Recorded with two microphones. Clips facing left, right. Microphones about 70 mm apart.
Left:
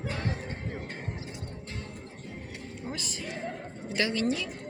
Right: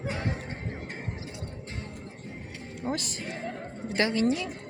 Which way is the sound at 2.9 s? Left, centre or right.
Right.